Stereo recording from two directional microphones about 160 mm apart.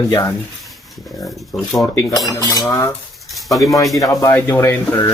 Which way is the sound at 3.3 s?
Centre (ahead or behind).